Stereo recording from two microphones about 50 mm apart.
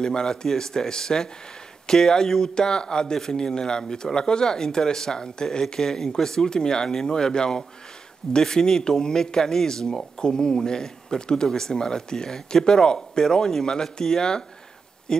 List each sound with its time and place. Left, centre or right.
0.0 s speech: centre